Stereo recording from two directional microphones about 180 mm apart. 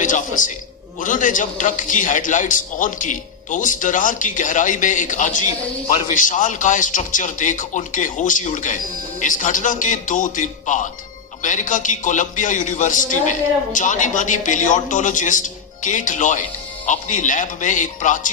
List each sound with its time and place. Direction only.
0.0 s a man's voice: 45° left (ahead or behind)